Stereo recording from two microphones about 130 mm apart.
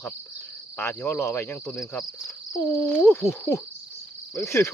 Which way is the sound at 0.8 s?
20° left (ahead or behind).